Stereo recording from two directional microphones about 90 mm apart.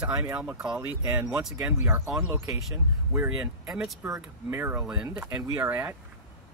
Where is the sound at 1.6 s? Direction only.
10° right (ahead or behind).